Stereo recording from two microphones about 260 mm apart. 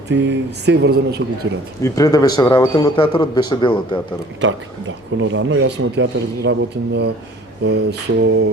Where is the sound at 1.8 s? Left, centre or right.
Centre.